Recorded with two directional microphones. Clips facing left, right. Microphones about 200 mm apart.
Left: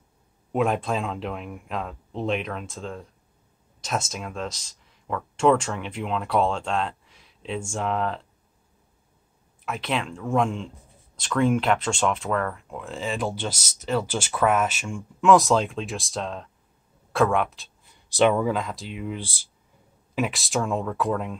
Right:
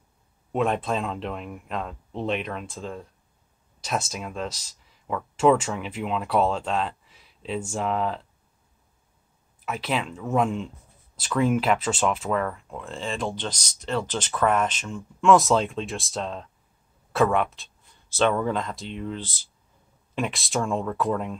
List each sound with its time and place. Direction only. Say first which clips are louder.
0.5 s speech: left 1 dB; centre (ahead or behind)
9.7 s speech: even; 5° right (ahead or behind)
18.1 s speech: left 2 dB; 10° left (ahead or behind)
20.2 s speech: left 1 dB; centre (ahead or behind)